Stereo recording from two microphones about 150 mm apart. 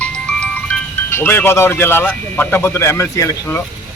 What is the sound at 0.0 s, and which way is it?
Speech, 10° left (ahead or behind).